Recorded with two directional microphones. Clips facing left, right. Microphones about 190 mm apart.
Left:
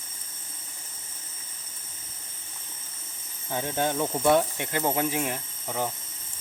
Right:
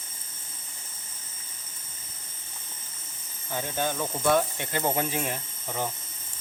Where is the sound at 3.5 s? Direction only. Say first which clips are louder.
Left 2 dB; 20° left (ahead or behind).